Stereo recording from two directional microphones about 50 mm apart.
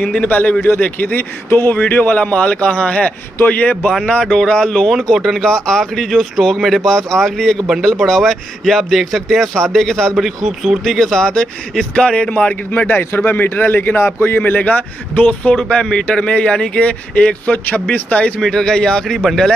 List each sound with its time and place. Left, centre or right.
0.0 s speech: left
4.0 s speech: left
4.9 s a man's voice: centre
5.4 s speech: centre
6.0 s a man's voice: centre
10.1 s speech: centre
10.8 s speech: centre
12.2 s speech: left
13.9 s a man's voice: left
14.4 s speech: left
15.5 s speech: centre; by 18.3 s left
18.4 s speech: centre
19.0 s a man's voice: centre